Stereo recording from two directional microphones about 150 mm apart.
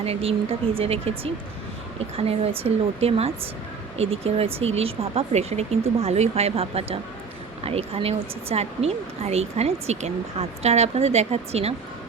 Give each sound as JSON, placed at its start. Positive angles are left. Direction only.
{"t": 0.0, "sound": "speech", "side_deg": -40}